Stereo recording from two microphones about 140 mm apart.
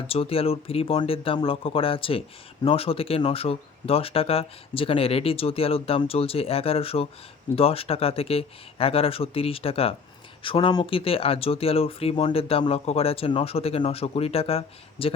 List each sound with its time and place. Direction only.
0.1 s speech: 45° left (ahead or behind)